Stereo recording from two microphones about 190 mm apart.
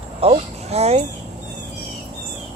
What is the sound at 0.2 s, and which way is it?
Speech, 35° right (ahead or behind).